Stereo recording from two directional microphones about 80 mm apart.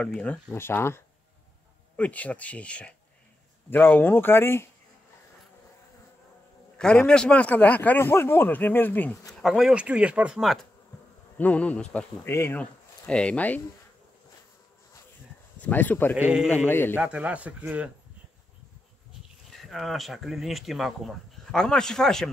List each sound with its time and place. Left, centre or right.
0.0 s speech: centre
0.6 s speech: left
2.0 s speech: centre
3.7 s speech: left
6.8 s speech: centre
9.3 s speech: centre
10.4 s speech: centre
11.3 s speech: centre
12.3 s speech: left
12.5 s speech: centre
15.6 s speech: left
17.0 s speech: centre
19.5 s speech: centre